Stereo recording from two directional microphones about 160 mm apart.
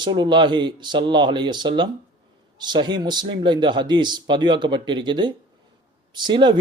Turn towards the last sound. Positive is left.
turn(degrees=-30)  # may be behind; listen again after turning